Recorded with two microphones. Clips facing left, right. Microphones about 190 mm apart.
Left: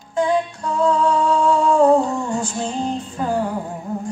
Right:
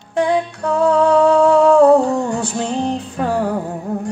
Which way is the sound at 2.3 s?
65° right (ahead or behind).